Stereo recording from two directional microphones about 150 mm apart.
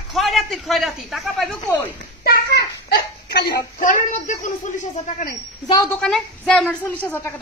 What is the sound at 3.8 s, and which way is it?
Speech, 60° left (ahead or behind).